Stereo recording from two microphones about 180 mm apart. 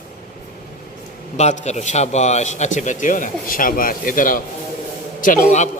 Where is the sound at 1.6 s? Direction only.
40° left (ahead or behind).